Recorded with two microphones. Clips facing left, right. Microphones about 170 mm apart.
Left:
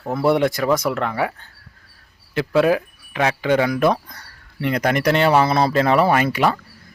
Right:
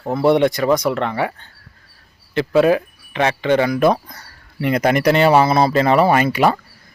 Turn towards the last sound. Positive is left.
turn(degrees=-5)  # may be behind; listen again after turning